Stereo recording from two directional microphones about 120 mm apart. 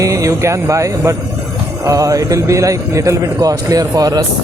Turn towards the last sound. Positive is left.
turn(degrees=-30)  # may be behind; listen again after turning